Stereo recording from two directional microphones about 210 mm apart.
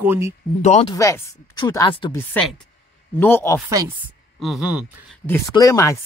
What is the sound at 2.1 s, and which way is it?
Speech, 5° left (ahead or behind).